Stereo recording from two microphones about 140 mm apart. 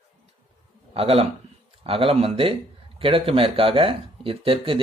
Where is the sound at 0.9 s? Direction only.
45° right (ahead or behind).